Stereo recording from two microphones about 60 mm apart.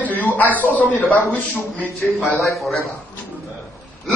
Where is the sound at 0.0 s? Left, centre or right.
Left.